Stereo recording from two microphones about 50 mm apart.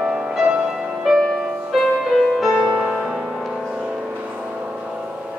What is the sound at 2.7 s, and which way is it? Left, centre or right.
Music, right.